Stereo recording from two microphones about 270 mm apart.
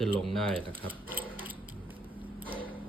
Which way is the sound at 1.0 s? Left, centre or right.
Centre.